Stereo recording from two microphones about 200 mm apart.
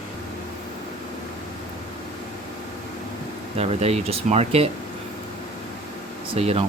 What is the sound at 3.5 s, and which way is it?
Speech, 30° right (ahead or behind).